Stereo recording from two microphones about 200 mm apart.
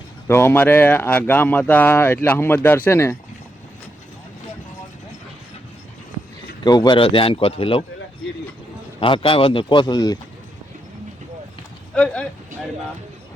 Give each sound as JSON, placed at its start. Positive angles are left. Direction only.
{"t": 0.3, "sound": "speech", "side_deg": 10}
{"t": 6.7, "sound": "speech", "side_deg": 20}
{"t": 9.0, "sound": "speech", "side_deg": 25}
{"t": 11.9, "sound": "speech", "side_deg": 5}